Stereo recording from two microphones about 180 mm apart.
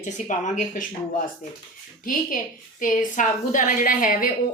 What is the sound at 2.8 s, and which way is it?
A woman's voice, 45° left (ahead or behind).